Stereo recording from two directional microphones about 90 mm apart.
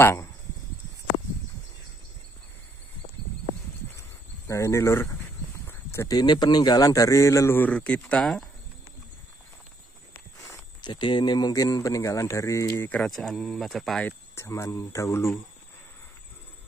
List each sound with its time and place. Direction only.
0.0 s speech: 30° left (ahead or behind)
4.5 s speech: 30° left (ahead or behind)
5.7 s a sound: 25° left (ahead or behind)
6.0 s speech: 50° left (ahead or behind); by 7.5 s 35° left (ahead or behind)
7.5 s speech: 15° left (ahead or behind)
10.8 s speech: 60° left (ahead or behind); by 12.8 s 35° left (ahead or behind)
13.0 s speech: 5° left (ahead or behind)
14.0 s speech: 30° left (ahead or behind)